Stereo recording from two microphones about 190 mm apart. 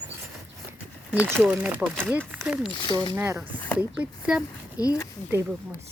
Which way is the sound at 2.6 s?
25° left (ahead or behind).